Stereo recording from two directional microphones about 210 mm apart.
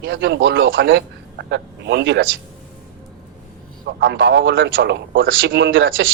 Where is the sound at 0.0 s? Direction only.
55° right (ahead or behind).